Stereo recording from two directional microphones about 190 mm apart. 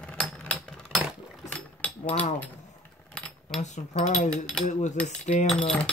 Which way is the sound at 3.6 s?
40° left (ahead or behind).